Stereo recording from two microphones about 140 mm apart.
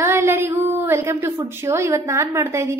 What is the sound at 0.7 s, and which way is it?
A woman's voice, 20° right (ahead or behind).